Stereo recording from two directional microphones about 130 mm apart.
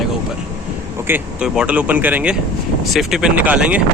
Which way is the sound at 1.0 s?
15° right (ahead or behind).